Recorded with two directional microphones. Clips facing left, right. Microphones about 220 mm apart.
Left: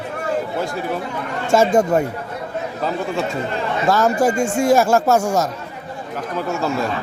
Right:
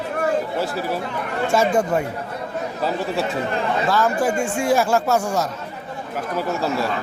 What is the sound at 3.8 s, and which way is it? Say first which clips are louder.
Speech: left 5 dB; 45° left (ahead or behind).